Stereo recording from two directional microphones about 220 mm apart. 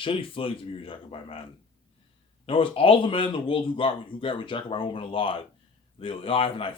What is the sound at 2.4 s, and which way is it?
Speech, 25° left (ahead or behind).